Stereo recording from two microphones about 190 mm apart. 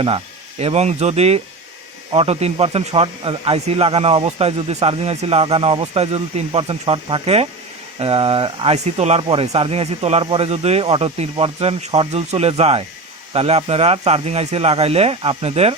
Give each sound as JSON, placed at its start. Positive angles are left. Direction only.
{"t": 0.6, "sound": "speech", "side_deg": -35}